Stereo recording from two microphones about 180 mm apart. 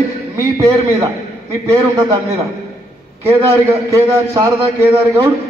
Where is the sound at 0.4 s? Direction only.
15° right (ahead or behind).